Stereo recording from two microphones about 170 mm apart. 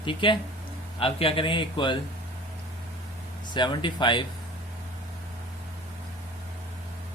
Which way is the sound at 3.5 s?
25° left (ahead or behind).